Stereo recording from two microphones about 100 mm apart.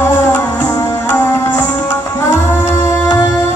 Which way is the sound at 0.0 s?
25° left (ahead or behind).